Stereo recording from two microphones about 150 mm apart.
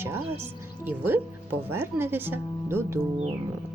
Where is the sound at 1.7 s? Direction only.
15° right (ahead or behind).